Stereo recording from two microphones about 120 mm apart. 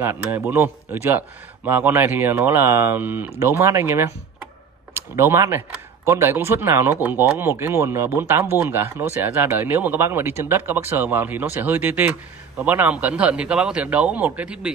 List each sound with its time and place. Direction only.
0.0 s speech: 20° right (ahead or behind)
1.7 s speech: 15° right (ahead or behind)